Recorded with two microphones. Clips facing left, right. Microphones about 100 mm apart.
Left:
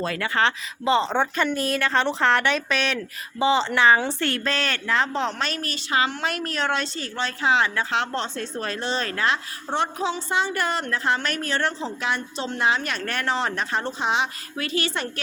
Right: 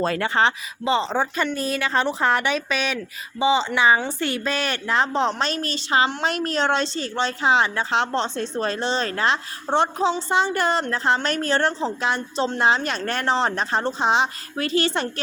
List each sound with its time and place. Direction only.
0.0 s a woman's voice: 30° right (ahead or behind)
0.9 s a woman's voice: centre (ahead or behind); by 15.2 s 30° right (ahead or behind)